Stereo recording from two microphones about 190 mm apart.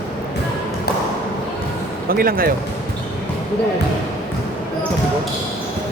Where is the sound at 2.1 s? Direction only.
50° right (ahead or behind).